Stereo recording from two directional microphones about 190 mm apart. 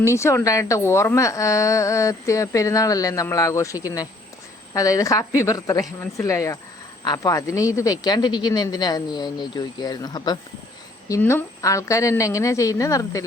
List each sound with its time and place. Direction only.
0.0 s a woman's voice: 15° left (ahead or behind)